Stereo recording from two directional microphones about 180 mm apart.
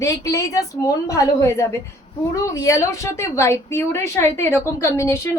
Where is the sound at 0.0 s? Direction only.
15° left (ahead or behind).